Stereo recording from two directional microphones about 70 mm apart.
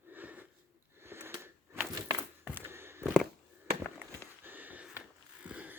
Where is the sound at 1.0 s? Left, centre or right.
Right.